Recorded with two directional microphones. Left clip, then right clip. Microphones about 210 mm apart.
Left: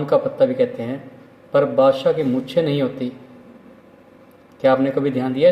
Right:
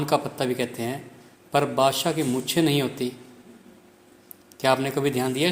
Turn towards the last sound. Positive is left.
turn(degrees=-40)  # may be behind; listen again after turning